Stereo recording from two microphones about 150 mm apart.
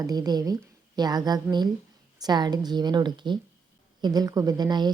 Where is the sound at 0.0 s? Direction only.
25° right (ahead or behind).